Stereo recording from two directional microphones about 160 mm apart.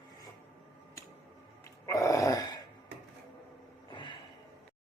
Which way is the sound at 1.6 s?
20° left (ahead or behind).